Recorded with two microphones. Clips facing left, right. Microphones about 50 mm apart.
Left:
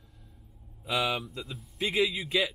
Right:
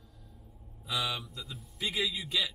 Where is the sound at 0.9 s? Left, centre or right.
Left.